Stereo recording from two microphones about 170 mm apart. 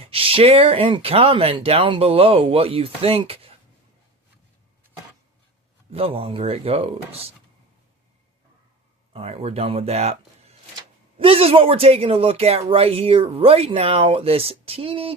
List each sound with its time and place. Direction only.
0.0 s speech: 35° right (ahead or behind)
5.9 s speech: 35° right (ahead or behind)
9.1 s speech: 35° right (ahead or behind)